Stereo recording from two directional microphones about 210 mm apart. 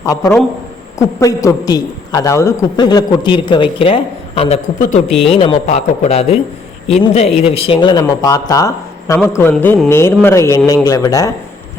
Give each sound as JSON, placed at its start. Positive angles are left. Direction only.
{"t": 0.0, "sound": "a man's voice", "side_deg": 15}